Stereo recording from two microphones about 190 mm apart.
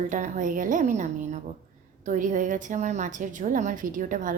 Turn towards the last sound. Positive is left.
turn(degrees=-45)  # may be behind; listen again after turning